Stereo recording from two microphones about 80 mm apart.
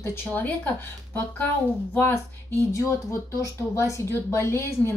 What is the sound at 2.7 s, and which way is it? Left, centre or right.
A woman's voice, left.